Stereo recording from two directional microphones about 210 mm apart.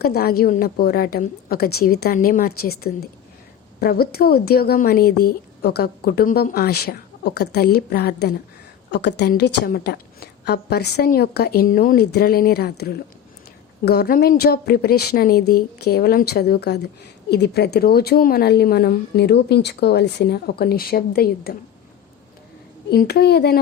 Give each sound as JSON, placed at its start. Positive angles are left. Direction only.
{"t": 0.0, "sound": "a woman's voice", "side_deg": 50}
{"t": 22.9, "sound": "a woman's voice", "side_deg": 50}